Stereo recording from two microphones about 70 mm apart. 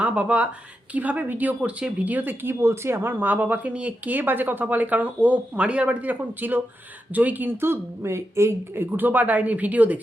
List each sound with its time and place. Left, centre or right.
0.0 s speech: centre
2.6 s speech: right